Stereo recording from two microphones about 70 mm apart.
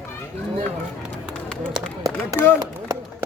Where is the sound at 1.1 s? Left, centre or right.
Centre.